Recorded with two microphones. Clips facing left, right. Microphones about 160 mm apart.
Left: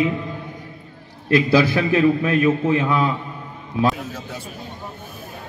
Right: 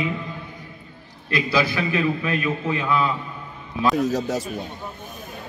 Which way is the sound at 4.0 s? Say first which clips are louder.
Right 10 dB; 40° right (ahead or behind).